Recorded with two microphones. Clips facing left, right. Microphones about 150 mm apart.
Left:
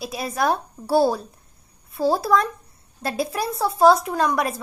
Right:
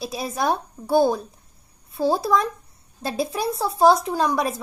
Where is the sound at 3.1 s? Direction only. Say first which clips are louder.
Right 1 dB; 25° right (ahead or behind).